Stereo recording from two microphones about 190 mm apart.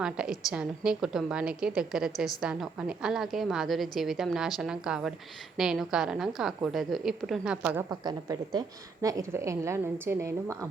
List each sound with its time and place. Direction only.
0.0 s a woman's voice: 5° right (ahead or behind)
7.9 s a woman's voice: 20° right (ahead or behind)